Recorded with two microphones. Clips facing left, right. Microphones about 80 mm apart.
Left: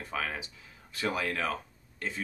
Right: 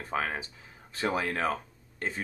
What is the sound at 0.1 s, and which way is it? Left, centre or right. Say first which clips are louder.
Speech: right 4 dB; right.